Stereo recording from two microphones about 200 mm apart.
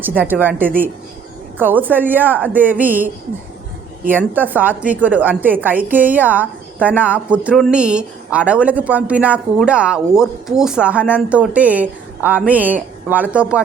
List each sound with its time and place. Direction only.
0.0 s a woman's voice: 10° right (ahead or behind)
4.4 s a woman's voice: 10° right (ahead or behind)